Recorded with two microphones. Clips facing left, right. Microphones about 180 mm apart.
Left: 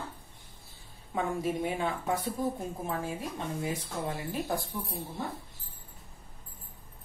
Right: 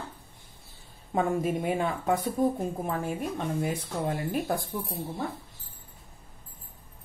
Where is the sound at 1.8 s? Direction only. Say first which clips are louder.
Right 4 dB; 55° right (ahead or behind).